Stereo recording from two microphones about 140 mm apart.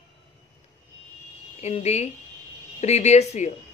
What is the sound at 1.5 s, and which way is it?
Speech, 50° left (ahead or behind).